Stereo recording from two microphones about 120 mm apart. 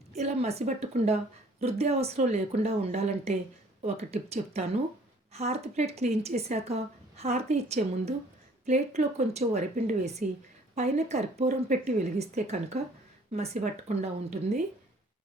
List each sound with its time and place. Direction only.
0.2 s speech: 60° right (ahead or behind)